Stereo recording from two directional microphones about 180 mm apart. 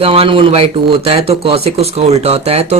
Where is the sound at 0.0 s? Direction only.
30° right (ahead or behind).